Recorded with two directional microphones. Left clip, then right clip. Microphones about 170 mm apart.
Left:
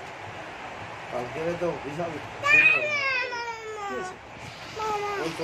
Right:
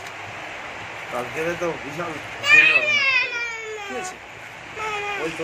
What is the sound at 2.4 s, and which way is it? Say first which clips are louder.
Children playing: right 5 dB; 60° left (ahead or behind).